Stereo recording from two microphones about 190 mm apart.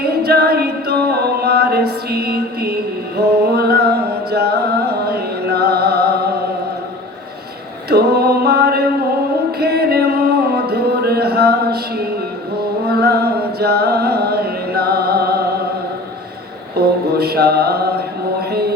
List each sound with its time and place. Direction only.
0.0 s a capella: 55° right (ahead or behind)
7.9 s music: 55° right (ahead or behind)
16.7 s mantra: 55° right (ahead or behind)
18.3 s a sound: 55° right (ahead or behind)